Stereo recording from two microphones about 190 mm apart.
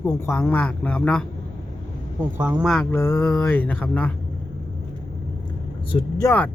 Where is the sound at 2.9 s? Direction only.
15° left (ahead or behind).